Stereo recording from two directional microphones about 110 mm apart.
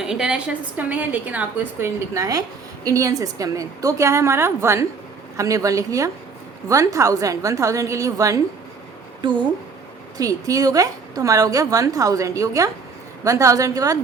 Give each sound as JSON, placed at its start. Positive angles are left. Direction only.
{"t": 0.0, "sound": "a woman's voice", "side_deg": -5}
{"t": 9.2, "sound": "a woman's voice", "side_deg": -45}
{"t": 10.2, "sound": "a woman's voice", "side_deg": -30}